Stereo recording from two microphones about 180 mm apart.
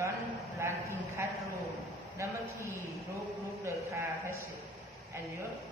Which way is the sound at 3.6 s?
15° right (ahead or behind).